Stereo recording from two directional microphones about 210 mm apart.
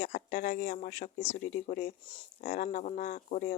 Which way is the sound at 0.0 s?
40° left (ahead or behind).